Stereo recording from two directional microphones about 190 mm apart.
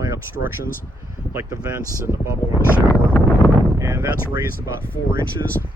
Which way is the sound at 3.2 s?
20° left (ahead or behind).